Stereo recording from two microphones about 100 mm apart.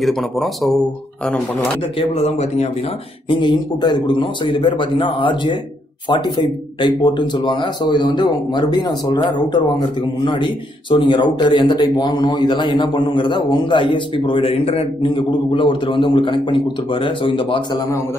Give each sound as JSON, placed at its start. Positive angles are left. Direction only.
{"t": 0.0, "sound": "speech", "side_deg": 0}
{"t": 2.0, "sound": "speech", "side_deg": 85}
{"t": 3.3, "sound": "speech", "side_deg": 55}
{"t": 15.0, "sound": "a man's voice", "side_deg": 55}